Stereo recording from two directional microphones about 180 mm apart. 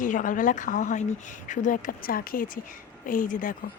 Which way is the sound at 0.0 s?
45° left (ahead or behind).